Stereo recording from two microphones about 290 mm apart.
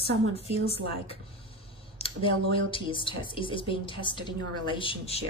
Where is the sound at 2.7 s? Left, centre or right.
Centre.